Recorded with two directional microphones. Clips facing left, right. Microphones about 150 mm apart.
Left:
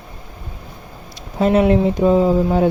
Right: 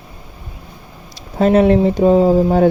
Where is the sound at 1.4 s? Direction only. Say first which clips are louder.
Right 3 dB; 35° right (ahead or behind).